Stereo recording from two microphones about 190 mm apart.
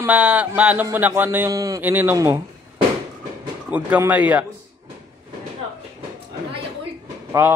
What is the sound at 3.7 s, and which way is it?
Speech, 10° right (ahead or behind).